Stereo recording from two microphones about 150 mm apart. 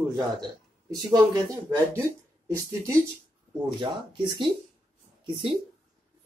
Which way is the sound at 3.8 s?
30° right (ahead or behind).